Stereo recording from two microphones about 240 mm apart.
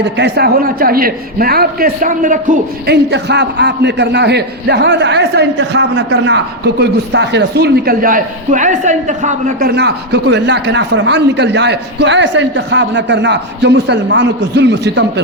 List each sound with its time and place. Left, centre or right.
0.0 s a man's voice: right